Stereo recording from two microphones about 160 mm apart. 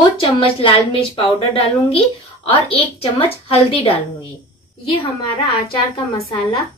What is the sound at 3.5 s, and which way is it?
Speech, 40° left (ahead or behind).